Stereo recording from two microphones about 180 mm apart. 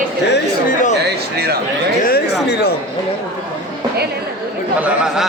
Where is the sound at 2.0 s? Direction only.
60° left (ahead or behind).